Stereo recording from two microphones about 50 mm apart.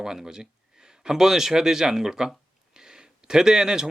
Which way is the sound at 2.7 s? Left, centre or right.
Centre.